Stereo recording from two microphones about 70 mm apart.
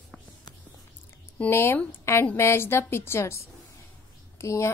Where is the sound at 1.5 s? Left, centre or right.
Left.